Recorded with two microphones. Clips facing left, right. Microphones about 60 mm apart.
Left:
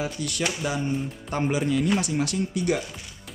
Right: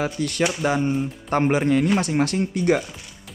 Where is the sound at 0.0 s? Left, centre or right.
Right.